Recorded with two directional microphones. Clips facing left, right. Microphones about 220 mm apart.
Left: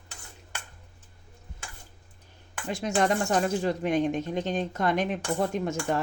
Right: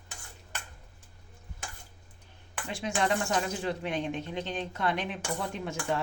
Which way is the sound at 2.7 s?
40° left (ahead or behind).